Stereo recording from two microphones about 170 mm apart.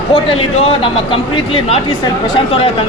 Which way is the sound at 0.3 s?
35° left (ahead or behind).